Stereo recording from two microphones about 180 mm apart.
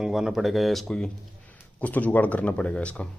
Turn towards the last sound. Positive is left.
turn(degrees=5)  # may be behind; listen again after turning